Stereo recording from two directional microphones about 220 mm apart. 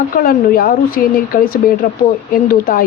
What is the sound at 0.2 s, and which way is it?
Speech, 40° left (ahead or behind).